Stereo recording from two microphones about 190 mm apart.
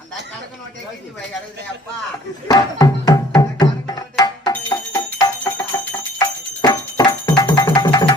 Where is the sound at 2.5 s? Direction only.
20° left (ahead or behind).